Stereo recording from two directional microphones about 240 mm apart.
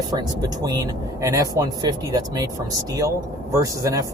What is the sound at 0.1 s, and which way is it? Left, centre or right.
Speech, centre.